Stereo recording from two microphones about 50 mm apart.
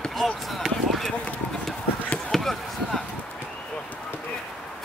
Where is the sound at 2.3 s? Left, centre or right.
Centre.